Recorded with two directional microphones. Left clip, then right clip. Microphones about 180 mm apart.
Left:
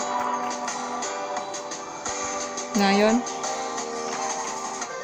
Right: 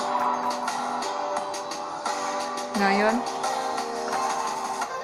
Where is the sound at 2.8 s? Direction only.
75° left (ahead or behind).